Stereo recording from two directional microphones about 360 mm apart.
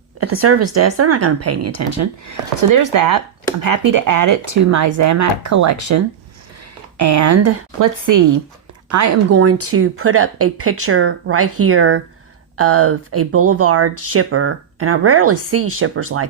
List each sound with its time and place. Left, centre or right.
0.2 s speech: right